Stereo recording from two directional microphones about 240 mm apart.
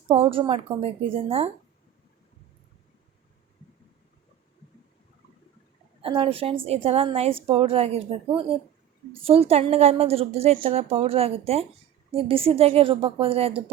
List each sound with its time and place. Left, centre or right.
0.1 s a woman's voice: right
6.0 s a woman's voice: right